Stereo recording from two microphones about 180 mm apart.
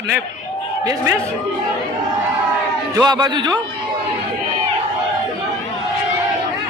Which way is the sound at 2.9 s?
25° right (ahead or behind).